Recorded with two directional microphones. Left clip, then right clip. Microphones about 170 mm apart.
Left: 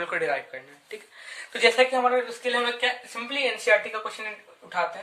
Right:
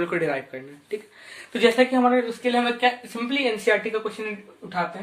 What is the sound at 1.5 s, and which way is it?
Speech, 15° right (ahead or behind).